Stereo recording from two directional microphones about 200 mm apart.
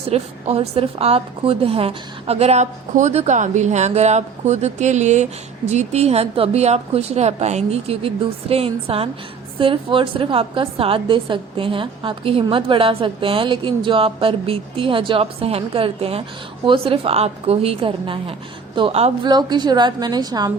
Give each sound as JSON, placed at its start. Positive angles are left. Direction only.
{"t": 0.1, "sound": "a woman's voice", "side_deg": -30}